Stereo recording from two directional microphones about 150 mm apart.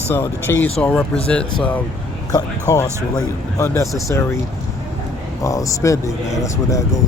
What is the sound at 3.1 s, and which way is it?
Speech, 20° left (ahead or behind).